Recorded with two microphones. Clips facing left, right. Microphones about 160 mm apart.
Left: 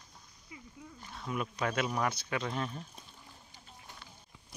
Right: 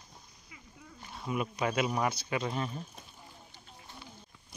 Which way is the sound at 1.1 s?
10° right (ahead or behind).